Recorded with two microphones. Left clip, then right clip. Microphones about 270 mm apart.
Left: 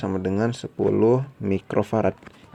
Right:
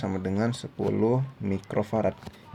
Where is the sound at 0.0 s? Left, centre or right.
Left.